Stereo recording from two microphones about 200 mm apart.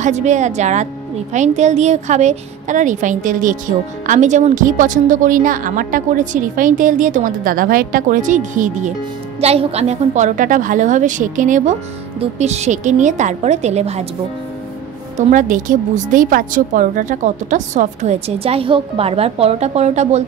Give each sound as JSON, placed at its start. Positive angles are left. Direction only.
{"t": 0.0, "sound": "a woman's voice", "side_deg": -35}
{"t": 15.1, "sound": "a woman's voice", "side_deg": -40}